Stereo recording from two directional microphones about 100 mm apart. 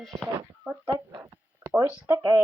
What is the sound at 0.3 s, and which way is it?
Speech, 15° right (ahead or behind).